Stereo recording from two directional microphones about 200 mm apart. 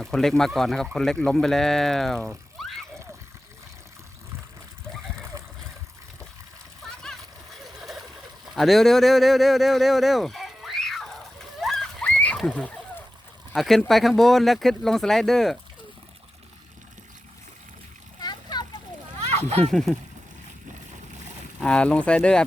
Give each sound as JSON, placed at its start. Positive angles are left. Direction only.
{"t": 0.0, "sound": "speech", "side_deg": 0}
{"t": 2.2, "sound": "a sound", "side_deg": 0}
{"t": 7.8, "sound": "turkey", "side_deg": 0}
{"t": 8.5, "sound": "speech", "side_deg": 0}
{"t": 11.6, "sound": "a sound", "side_deg": 0}
{"t": 13.5, "sound": "speech", "side_deg": 0}
{"t": 18.2, "sound": "splash", "side_deg": 20}
{"t": 19.5, "sound": "speech", "side_deg": -30}
{"t": 19.7, "sound": "speech", "side_deg": 0}
{"t": 21.6, "sound": "speech", "side_deg": 5}